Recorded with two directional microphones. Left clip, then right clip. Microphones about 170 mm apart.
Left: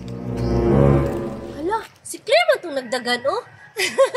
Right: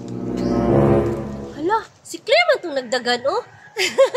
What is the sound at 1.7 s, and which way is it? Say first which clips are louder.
A woman's voice: right 4 dB; centre (ahead or behind).